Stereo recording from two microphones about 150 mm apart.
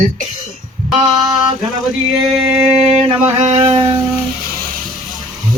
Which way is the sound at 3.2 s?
40° right (ahead or behind).